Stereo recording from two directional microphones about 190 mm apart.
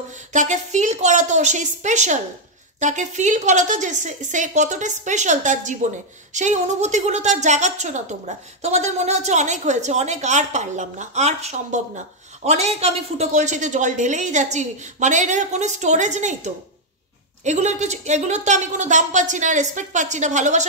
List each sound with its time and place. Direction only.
0.3 s a woman's voice: 40° right (ahead or behind)